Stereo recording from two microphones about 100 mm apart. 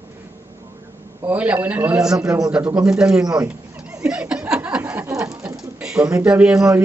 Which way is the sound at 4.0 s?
10° right (ahead or behind).